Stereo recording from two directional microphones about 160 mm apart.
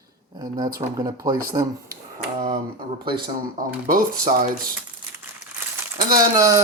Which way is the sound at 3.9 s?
60° right (ahead or behind).